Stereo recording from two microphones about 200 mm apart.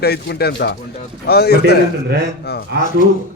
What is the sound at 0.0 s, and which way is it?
A man's voice, 55° left (ahead or behind).